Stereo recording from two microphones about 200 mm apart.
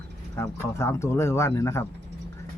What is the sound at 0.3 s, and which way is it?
Speech, 15° left (ahead or behind).